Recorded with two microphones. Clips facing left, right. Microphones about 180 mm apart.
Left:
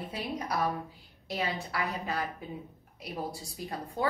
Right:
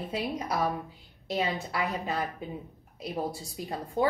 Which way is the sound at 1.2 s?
25° right (ahead or behind).